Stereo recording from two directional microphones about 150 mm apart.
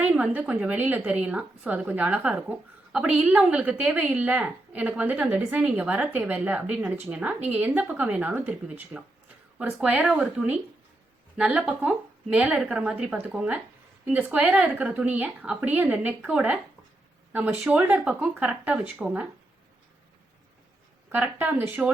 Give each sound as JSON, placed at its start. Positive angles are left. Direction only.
{"t": 0.0, "sound": "a woman's voice", "side_deg": -10}
{"t": 21.1, "sound": "a woman's voice", "side_deg": -10}